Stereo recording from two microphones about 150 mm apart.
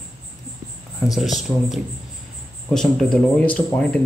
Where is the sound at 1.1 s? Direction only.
Centre (ahead or behind).